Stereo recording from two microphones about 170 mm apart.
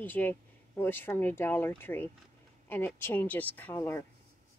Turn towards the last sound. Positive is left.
turn(degrees=15)  # may be behind; listen again after turning